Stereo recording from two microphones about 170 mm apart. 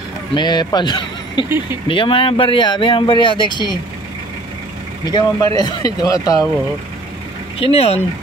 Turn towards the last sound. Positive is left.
turn(degrees=35)  # may be behind; listen again after turning